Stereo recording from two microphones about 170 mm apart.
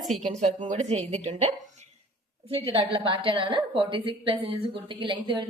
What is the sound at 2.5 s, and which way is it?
A woman's voice, 30° right (ahead or behind).